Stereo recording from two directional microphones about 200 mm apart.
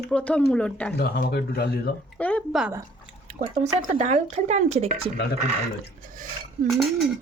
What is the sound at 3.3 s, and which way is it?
Speech, 35° right (ahead or behind).